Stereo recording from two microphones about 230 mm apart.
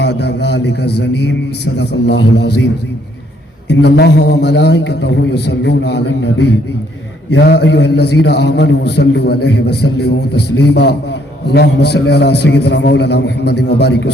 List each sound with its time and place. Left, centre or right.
0.0 s a man's voice: left
3.7 s a man's voice: left